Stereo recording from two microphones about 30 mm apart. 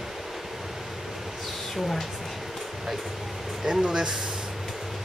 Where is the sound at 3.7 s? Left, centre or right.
Centre.